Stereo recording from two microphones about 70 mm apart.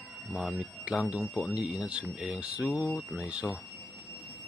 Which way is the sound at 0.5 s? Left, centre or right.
Centre.